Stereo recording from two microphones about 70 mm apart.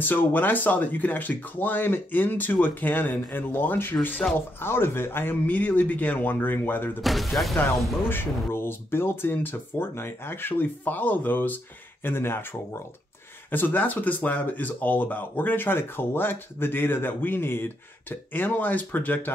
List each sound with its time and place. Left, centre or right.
0.0 s speech: left
7.0 s speech: centre
8.1 s speech: left
13.5 s speech: left